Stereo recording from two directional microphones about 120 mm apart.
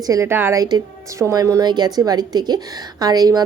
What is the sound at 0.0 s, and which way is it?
A woman's voice, 25° right (ahead or behind).